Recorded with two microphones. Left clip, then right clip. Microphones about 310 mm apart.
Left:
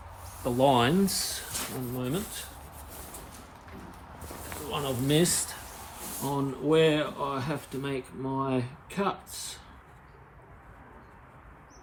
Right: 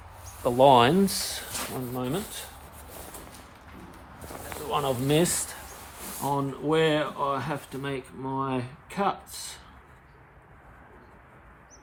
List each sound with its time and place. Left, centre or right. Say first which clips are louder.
0.4 s speech: right 6 dB; right
4.4 s speech: right 5 dB; right